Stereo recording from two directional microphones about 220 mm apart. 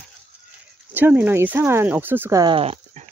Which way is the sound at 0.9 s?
10° right (ahead or behind).